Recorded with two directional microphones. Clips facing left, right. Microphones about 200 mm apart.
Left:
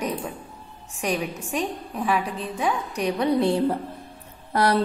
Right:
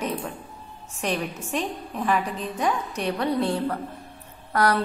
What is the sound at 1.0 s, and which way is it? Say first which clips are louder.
A woman's voice: left 1 dB; 10° left (ahead or behind).